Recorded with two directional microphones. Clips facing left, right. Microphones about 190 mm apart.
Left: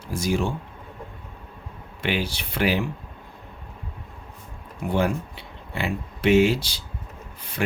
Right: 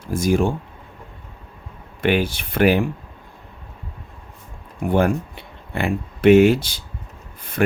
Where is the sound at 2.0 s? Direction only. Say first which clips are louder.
Right 7 dB; 50° right (ahead or behind).